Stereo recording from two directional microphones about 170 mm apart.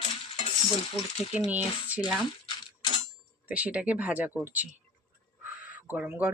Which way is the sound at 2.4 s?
30° left (ahead or behind).